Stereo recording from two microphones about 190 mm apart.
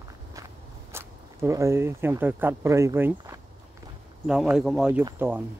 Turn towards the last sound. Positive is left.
turn(degrees=-10)  # may be behind; listen again after turning